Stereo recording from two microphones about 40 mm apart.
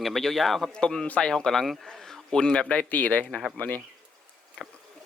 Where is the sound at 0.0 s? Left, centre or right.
Centre.